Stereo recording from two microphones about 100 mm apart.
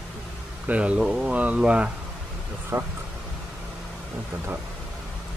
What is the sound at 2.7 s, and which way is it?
Speech, 25° right (ahead or behind).